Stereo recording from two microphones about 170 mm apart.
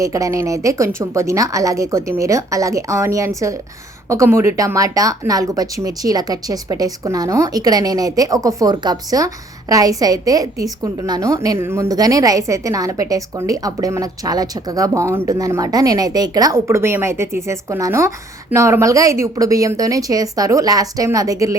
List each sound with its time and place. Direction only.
0.0 s speech: 20° right (ahead or behind)